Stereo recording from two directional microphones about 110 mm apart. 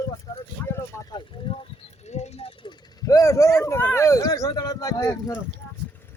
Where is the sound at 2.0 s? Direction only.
90° left.